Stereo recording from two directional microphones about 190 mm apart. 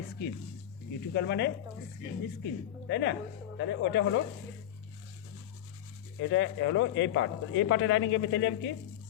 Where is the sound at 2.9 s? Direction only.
65° left (ahead or behind).